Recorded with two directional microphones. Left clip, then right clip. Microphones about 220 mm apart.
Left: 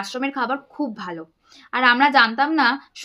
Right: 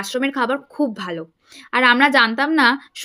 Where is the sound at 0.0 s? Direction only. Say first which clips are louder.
Right 4 dB; 20° right (ahead or behind).